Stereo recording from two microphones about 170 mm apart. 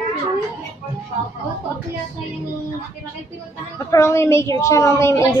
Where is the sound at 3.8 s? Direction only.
15° left (ahead or behind).